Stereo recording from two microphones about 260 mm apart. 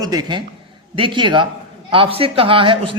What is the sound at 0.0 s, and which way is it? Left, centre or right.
Speech, centre.